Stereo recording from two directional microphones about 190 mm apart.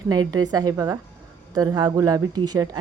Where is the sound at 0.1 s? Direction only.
20° right (ahead or behind).